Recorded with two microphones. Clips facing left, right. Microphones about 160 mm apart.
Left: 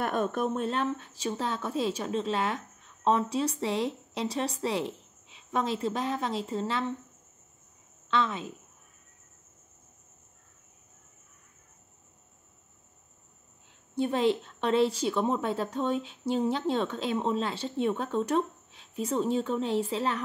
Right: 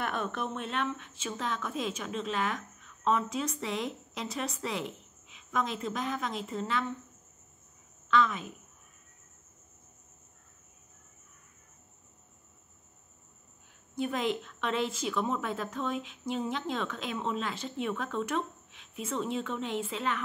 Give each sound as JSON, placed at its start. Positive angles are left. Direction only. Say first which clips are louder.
{"t": 0.0, "sound": "a woman's voice", "louder": "left 5 dB", "side_deg": 45}
{"t": 8.1, "sound": "a woman's voice", "louder": "right 1 dB", "side_deg": 30}
{"t": 13.9, "sound": "a woman's voice", "louder": "left 5 dB", "side_deg": 30}